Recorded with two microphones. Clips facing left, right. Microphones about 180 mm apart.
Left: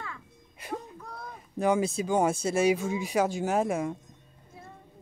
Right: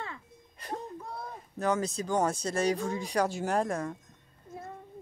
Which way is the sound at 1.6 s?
10° left (ahead or behind).